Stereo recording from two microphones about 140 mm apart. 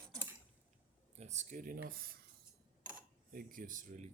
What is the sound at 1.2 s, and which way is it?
Speech, 65° right (ahead or behind).